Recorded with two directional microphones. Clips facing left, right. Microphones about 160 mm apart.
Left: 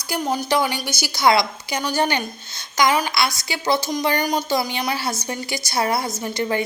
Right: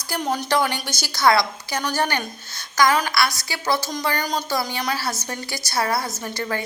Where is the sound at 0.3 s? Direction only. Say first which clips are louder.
Left 1 dB; 5° left (ahead or behind).